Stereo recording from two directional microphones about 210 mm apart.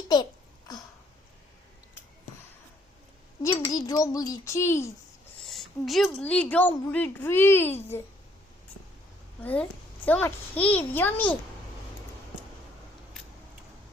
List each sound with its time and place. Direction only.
0.1 s a sound: 20° left (ahead or behind)
3.4 s a woman's voice: 20° left (ahead or behind)
5.5 s a woman's voice: centre (ahead or behind)
9.4 s a woman's voice: 10° left (ahead or behind)